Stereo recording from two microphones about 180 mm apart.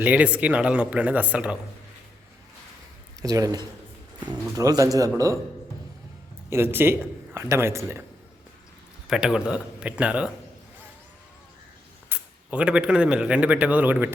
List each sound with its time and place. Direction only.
0.0 s speech: 10° right (ahead or behind)
3.2 s speech: 20° right (ahead or behind)
6.5 s speech: 10° right (ahead or behind)
9.0 s speech: 5° right (ahead or behind)
12.0 s speech: 5° right (ahead or behind)